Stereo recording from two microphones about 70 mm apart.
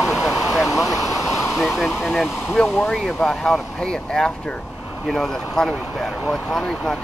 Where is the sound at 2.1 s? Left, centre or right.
Centre.